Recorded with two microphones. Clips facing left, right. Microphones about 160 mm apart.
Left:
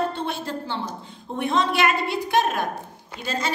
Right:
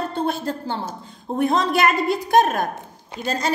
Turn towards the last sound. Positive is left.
turn(degrees=-40)  # may be behind; listen again after turning